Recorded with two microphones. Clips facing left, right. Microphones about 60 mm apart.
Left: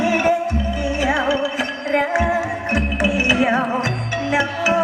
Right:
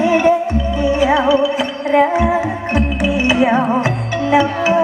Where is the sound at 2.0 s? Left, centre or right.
Right.